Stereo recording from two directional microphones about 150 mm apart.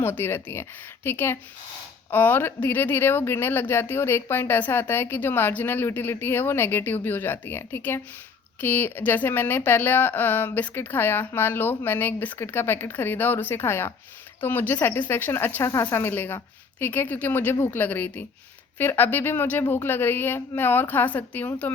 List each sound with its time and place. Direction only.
0.0 s speech: 15° left (ahead or behind)